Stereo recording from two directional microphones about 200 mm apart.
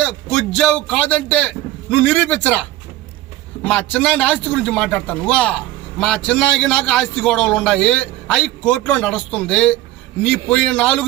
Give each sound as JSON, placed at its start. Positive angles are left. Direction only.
{"t": 0.0, "sound": "a man's voice", "side_deg": 5}